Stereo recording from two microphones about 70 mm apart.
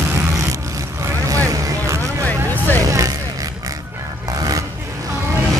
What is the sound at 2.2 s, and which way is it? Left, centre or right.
Vehicle, left.